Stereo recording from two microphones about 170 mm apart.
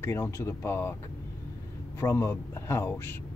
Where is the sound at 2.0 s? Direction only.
15° left (ahead or behind).